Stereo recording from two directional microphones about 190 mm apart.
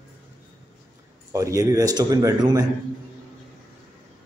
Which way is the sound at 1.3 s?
15° right (ahead or behind).